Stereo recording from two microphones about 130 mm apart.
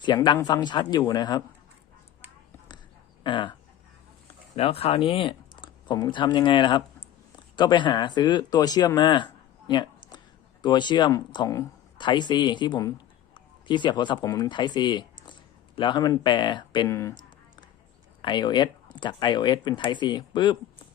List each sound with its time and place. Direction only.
0.1 s speech: 30° left (ahead or behind)
3.2 s speech: 35° left (ahead or behind)
4.5 s speech: 50° left (ahead or behind)
13.3 s a sound: 35° left (ahead or behind)
14.3 s speech: 30° left (ahead or behind)
16.9 s speech: 20° left (ahead or behind)
18.2 s speech: 35° left (ahead or behind)